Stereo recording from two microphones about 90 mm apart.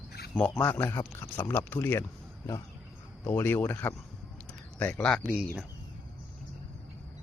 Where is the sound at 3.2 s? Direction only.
25° left (ahead or behind).